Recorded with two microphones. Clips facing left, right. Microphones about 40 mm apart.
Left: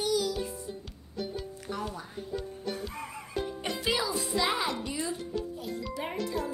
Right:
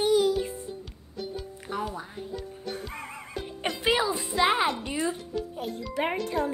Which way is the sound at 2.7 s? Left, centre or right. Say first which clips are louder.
Right 1 dB; right.